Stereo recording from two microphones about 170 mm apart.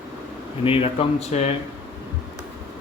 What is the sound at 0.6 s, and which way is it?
Speech, 30° left (ahead or behind).